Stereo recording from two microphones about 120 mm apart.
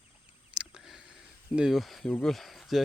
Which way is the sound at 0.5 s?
5° right (ahead or behind).